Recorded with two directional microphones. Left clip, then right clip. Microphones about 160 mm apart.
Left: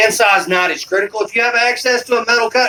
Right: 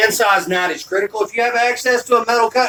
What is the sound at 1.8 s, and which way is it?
Speech, 10° left (ahead or behind).